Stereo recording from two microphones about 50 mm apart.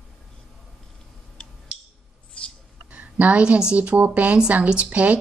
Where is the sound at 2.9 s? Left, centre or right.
Right.